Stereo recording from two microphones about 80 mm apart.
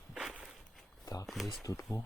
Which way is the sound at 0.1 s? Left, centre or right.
Centre.